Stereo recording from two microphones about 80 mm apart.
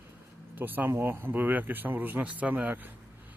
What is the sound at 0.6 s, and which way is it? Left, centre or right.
Speech, right.